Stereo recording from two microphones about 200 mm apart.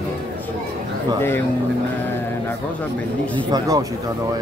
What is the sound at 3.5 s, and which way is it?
Speech, 20° right (ahead or behind).